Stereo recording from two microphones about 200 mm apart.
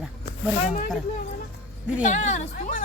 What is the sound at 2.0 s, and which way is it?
Speech, 35° left (ahead or behind).